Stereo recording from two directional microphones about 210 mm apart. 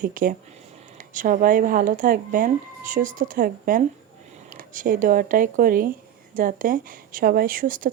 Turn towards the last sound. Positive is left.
turn(degrees=-40)  # may be behind; listen again after turning